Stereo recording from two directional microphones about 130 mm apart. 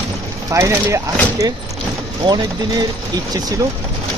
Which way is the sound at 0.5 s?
25° right (ahead or behind).